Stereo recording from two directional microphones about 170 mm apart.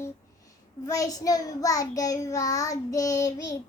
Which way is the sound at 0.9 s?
20° left (ahead or behind).